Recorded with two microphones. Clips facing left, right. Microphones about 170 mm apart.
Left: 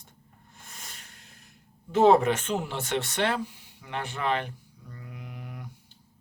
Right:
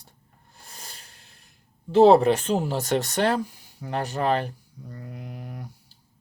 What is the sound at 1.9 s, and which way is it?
Speech, 35° right (ahead or behind).